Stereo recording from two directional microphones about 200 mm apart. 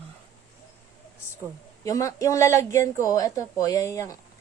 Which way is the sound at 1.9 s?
15° left (ahead or behind).